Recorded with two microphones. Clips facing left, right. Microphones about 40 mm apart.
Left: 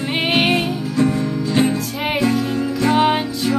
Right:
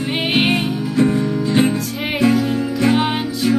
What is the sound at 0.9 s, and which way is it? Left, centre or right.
Music, centre.